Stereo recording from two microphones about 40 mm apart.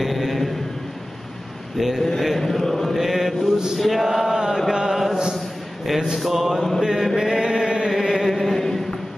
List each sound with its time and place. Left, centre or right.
0.0 s a sound: centre
1.8 s chant: centre
2.1 s mantra: centre
2.4 s chant: centre
3.0 s mantra: centre
3.7 s chant: centre
6.1 s chant: centre
7.9 s chant: centre